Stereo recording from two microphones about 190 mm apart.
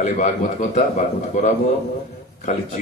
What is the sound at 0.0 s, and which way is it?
A man's voice, 40° left (ahead or behind).